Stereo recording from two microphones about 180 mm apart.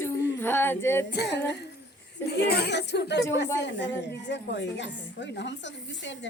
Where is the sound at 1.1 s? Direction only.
70° left (ahead or behind).